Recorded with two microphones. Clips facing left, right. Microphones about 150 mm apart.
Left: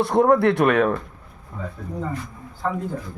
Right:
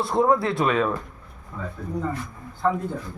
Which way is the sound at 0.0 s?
65° left (ahead or behind).